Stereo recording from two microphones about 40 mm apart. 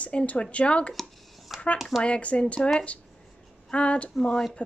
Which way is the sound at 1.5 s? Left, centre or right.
Centre.